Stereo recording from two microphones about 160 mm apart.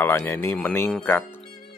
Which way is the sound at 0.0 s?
15° left (ahead or behind).